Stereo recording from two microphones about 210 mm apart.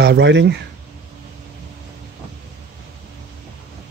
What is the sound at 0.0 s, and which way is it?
Speech, 55° right (ahead or behind).